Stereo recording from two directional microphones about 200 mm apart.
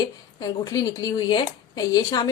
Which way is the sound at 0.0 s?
20° left (ahead or behind).